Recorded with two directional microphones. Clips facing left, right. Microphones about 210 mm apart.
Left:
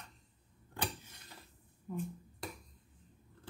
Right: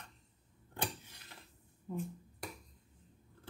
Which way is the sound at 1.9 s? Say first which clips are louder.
Even; 25° right (ahead or behind).